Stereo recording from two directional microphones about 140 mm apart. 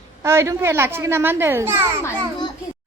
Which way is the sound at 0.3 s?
20° right (ahead or behind).